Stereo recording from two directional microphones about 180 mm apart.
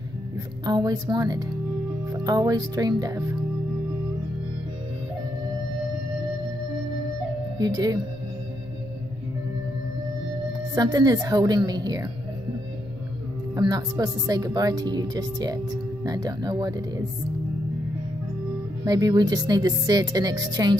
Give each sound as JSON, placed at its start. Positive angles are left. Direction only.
{"t": 0.7, "sound": "speech", "side_deg": -20}
{"t": 7.5, "sound": "speech", "side_deg": -20}
{"t": 10.7, "sound": "speech", "side_deg": -20}
{"t": 13.6, "sound": "speech", "side_deg": -20}
{"t": 18.9, "sound": "speech", "side_deg": -20}